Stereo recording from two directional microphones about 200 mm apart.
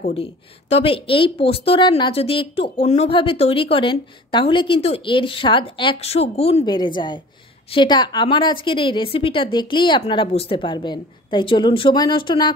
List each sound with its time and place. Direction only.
0.1 s speech: 30° left (ahead or behind)